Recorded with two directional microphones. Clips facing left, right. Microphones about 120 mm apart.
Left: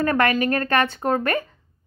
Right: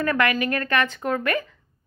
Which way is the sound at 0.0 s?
35° left (ahead or behind).